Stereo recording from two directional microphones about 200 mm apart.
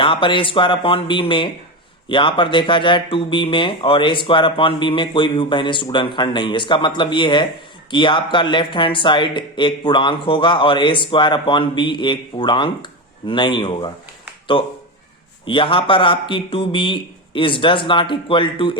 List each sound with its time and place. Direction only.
0.0 s speech: 25° left (ahead or behind)